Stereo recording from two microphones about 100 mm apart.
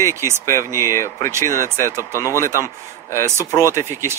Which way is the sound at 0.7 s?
30° left (ahead or behind).